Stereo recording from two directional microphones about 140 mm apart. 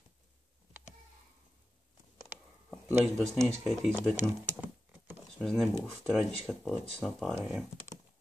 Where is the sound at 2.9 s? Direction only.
15° right (ahead or behind).